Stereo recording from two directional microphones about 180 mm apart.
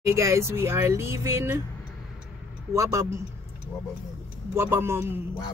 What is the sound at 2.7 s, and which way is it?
Speech, 15° right (ahead or behind).